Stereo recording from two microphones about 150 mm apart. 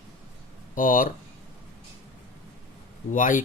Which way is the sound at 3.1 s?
60° left (ahead or behind).